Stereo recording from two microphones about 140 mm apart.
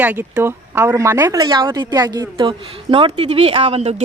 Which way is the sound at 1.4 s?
30° right (ahead or behind).